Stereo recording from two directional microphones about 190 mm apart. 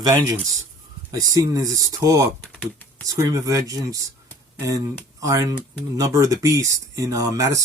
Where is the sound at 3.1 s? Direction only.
15° right (ahead or behind).